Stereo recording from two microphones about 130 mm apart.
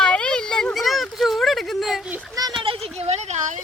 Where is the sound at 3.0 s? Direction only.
60° right (ahead or behind).